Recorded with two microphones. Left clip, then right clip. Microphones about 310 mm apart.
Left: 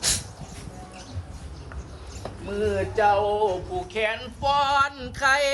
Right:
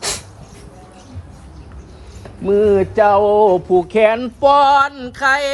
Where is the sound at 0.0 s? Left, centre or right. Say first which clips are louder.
Right 3 dB; centre.